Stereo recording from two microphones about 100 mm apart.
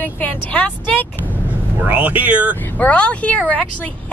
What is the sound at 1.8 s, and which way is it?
Speech, 15° right (ahead or behind).